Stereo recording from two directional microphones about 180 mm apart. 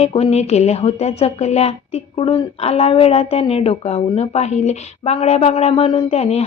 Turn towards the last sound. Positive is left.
turn(degrees=35)  # may be behind; listen again after turning